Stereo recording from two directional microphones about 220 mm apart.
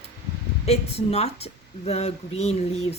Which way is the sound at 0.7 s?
30° left (ahead or behind).